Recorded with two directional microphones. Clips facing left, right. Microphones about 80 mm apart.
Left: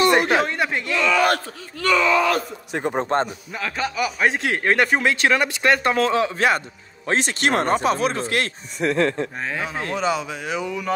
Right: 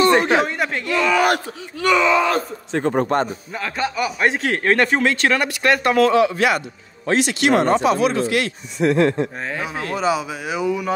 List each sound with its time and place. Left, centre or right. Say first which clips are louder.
0.4 s speech: right 1 dB; centre
0.8 s speech: right 2 dB; centre
2.7 s speech: right 4 dB; centre
3.5 s speech: right 2 dB; centre; by 8.5 s left
8.7 s speech: right 4 dB; right
9.4 s speech: right 1 dB; centre